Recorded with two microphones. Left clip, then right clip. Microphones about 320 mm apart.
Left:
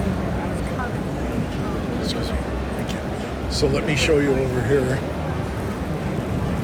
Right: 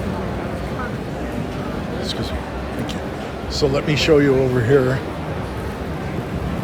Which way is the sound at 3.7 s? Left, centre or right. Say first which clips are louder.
Right 5 dB; centre.